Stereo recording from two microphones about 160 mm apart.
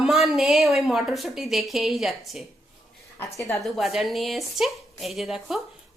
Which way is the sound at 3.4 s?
15° left (ahead or behind).